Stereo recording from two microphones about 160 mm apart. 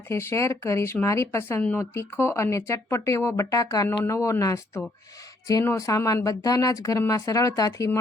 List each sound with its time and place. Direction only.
0.1 s speech: 15° left (ahead or behind)